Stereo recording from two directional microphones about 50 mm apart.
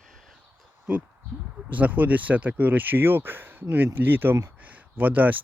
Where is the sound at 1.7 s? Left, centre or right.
Right.